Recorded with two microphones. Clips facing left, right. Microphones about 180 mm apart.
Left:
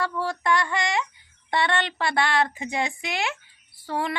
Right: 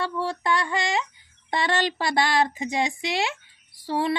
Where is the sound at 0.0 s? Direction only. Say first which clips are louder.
Even; 30° right (ahead or behind).